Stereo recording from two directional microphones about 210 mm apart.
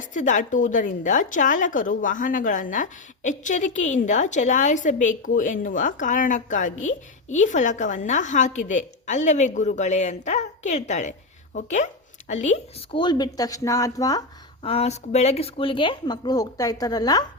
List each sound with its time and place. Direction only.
0.0 s a woman's voice: 35° left (ahead or behind)
13.0 s a woman's voice: 20° left (ahead or behind)